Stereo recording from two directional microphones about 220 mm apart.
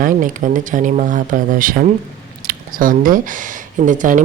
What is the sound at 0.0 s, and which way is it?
Speech, 35° right (ahead or behind).